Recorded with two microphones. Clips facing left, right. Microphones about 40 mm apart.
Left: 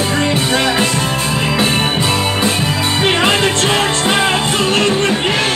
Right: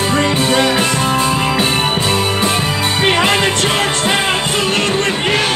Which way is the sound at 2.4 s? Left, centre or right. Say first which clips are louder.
Even; centre.